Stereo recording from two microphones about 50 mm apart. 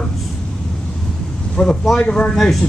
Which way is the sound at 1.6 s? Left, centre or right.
Left.